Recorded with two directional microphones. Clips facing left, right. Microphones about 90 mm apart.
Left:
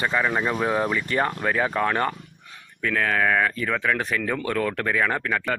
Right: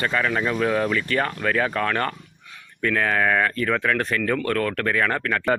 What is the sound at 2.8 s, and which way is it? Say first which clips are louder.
Speech: right 1 dB; centre (ahead or behind).